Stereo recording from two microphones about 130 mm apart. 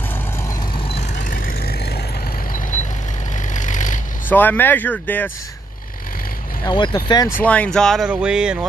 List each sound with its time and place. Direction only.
0.7 s vehicle: 45° left (ahead or behind)
1.1 s vehicle: 90° left
2.7 s vehicle: 70° left (ahead or behind)
3.5 s a sound: 75° left (ahead or behind)
4.3 s speech: 15° left (ahead or behind)
6.6 s speech: 35° left (ahead or behind)
7.2 s speech: 15° left (ahead or behind)
8.1 s a sound: 5° right (ahead or behind)